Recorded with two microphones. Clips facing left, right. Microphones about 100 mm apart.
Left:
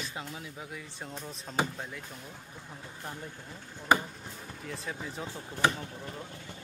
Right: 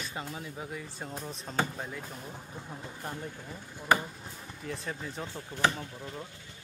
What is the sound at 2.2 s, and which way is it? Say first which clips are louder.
Speech: right 4 dB; 25° right (ahead or behind).